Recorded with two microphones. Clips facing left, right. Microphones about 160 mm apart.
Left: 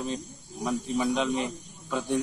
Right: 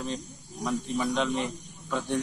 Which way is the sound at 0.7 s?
5° left (ahead or behind).